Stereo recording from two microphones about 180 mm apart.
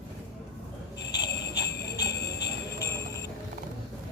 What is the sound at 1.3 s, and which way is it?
Jingle bell, 65° left (ahead or behind).